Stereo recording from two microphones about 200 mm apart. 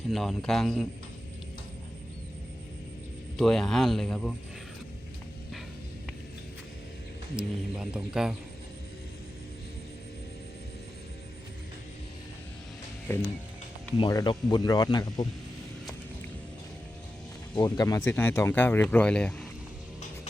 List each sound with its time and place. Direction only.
0.1 s speech: centre (ahead or behind)
3.3 s speech: centre (ahead or behind)
7.3 s speech: 5° right (ahead or behind)
13.1 s speech: 10° left (ahead or behind)
17.5 s speech: 20° left (ahead or behind); by 19.5 s 5° left (ahead or behind)